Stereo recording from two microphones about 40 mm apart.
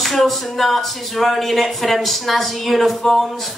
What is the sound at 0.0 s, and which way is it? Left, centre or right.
Speech, centre.